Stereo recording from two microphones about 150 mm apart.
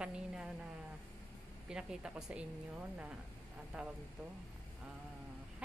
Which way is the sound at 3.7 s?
5° right (ahead or behind).